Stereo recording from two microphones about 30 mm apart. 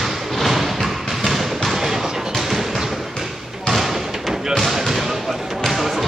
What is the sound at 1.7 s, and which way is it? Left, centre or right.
Music, centre.